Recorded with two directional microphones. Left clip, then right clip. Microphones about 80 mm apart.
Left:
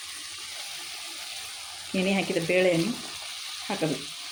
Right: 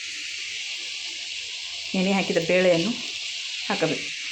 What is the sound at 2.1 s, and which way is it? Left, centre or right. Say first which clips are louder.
Frying: right 4 dB; centre.